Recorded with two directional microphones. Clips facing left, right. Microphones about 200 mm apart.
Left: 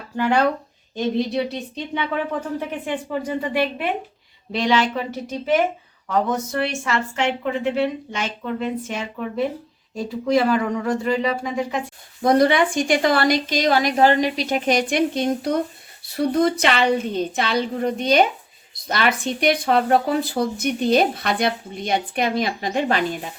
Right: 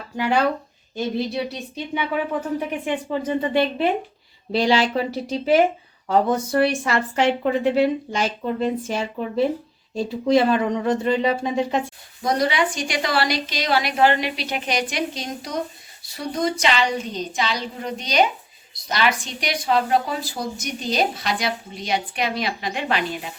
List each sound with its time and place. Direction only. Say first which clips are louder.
0.9 s speech: left 3 dB; 5° right (ahead or behind); by 11.8 s 25° right (ahead or behind)
12.2 s a woman's voice: left 5 dB; 55° left (ahead or behind)